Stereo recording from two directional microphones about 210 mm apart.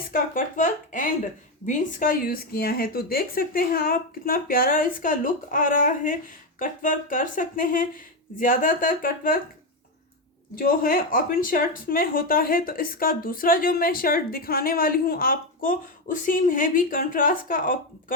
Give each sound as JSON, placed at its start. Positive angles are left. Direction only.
{"t": 0.1, "sound": "speech", "side_deg": 40}
{"t": 10.5, "sound": "speech", "side_deg": 45}